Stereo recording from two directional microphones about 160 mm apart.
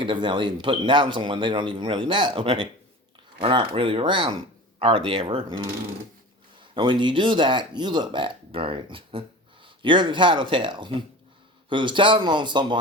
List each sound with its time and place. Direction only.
0.0 s speech: 30° right (ahead or behind)